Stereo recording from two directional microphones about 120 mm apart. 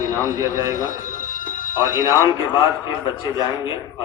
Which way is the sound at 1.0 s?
90° left.